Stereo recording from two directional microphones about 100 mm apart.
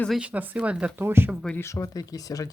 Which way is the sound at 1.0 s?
25° right (ahead or behind).